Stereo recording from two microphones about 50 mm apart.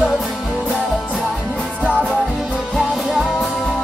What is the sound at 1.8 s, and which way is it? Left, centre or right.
Music, right.